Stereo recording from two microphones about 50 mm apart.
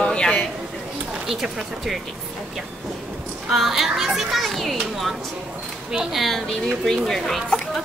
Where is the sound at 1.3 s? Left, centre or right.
Centre.